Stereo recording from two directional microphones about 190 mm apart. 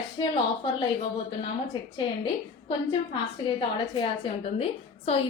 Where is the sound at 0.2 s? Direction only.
25° left (ahead or behind).